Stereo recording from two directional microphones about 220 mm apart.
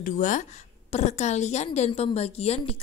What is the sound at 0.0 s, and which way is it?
A woman's voice, 35° left (ahead or behind).